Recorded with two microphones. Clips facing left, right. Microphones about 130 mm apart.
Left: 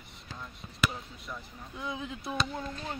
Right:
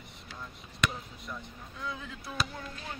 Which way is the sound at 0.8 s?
5° left (ahead or behind).